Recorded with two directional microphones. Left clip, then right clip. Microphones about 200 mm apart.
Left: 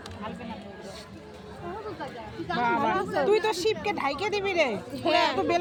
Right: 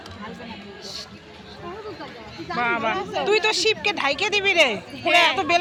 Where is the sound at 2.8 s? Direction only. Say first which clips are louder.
Right 1 dB; 60° left (ahead or behind).